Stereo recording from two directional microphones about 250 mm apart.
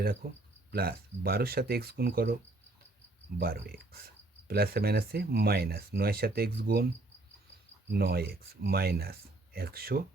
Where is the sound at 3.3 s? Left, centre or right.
Right.